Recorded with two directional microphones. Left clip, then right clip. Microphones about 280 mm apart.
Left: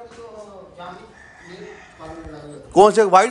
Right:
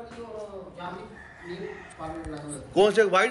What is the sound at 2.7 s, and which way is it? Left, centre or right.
Speech, left.